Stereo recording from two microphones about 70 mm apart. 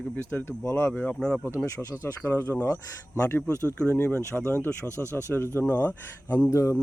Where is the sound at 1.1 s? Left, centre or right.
Centre.